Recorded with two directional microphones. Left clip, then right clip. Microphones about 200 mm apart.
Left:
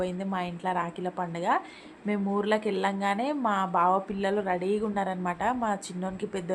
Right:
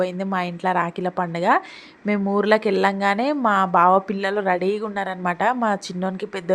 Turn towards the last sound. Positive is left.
turn(degrees=-30)  # may be behind; listen again after turning